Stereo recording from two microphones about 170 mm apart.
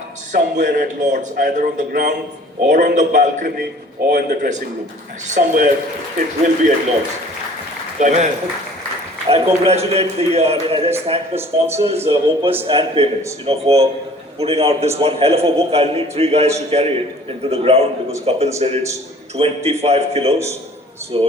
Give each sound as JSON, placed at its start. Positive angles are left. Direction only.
{"t": 0.3, "sound": "a man's voice", "side_deg": -50}
{"t": 7.9, "sound": "a man's voice", "side_deg": -45}
{"t": 9.3, "sound": "a man's voice", "side_deg": -35}
{"t": 11.3, "sound": "speech", "side_deg": -15}
{"t": 12.0, "sound": "a man's voice", "side_deg": -35}